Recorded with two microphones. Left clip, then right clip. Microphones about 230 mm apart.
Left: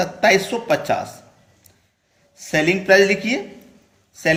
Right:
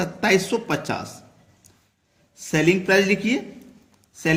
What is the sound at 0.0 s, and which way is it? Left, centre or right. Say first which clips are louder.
Speech: left 5 dB; right.